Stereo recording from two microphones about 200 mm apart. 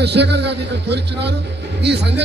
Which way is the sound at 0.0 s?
55° right (ahead or behind).